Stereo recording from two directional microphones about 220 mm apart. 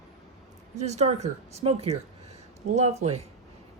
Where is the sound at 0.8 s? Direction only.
30° right (ahead or behind).